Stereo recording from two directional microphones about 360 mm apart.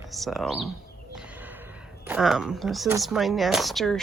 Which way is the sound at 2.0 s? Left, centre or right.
Centre.